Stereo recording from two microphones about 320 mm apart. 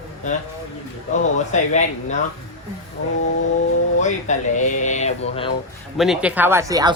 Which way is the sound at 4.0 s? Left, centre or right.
Left.